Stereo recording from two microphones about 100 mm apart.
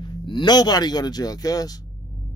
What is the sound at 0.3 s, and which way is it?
Speech, 50° left (ahead or behind).